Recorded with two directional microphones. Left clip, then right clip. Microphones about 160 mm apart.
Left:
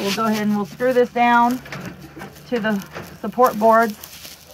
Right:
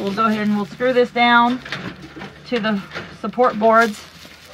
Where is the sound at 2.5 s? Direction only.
Centre (ahead or behind).